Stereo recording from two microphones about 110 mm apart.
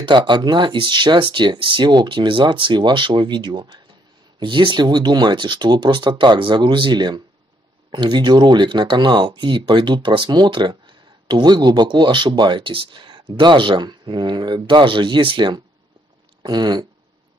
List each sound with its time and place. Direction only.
0.0 s speech: 45° right (ahead or behind)